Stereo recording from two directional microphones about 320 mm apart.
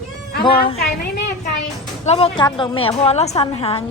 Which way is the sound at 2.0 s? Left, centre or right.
Centre.